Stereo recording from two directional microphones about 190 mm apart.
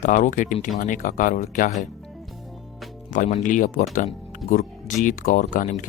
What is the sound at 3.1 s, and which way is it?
Speech, 45° left (ahead or behind).